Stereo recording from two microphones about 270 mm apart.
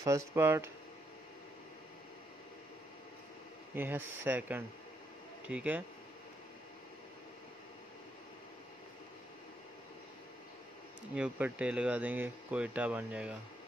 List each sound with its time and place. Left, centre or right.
0.0 s speech: centre
3.7 s speech: centre
11.1 s speech: centre